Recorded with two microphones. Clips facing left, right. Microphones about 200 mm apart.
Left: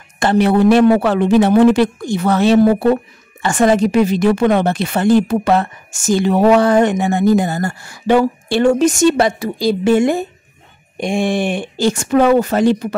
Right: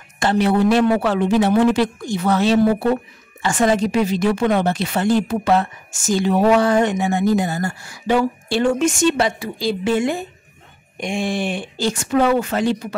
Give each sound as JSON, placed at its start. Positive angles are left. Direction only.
{"t": 0.2, "sound": "speech", "side_deg": 55}
{"t": 8.7, "sound": "a woman's voice", "side_deg": 40}